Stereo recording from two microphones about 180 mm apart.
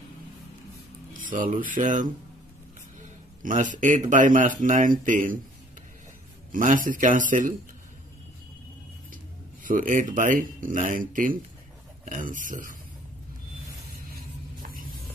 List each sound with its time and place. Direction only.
1.2 s a sound: 45° right (ahead or behind)
1.6 s speech: 45° right (ahead or behind)
3.4 s speech: 45° right (ahead or behind)
6.5 s speech: 50° right (ahead or behind)
9.1 s speech: 50° right (ahead or behind)
14.1 s a sound: 50° right (ahead or behind)